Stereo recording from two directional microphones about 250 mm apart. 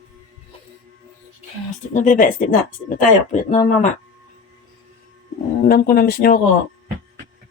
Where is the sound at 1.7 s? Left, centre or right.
Left.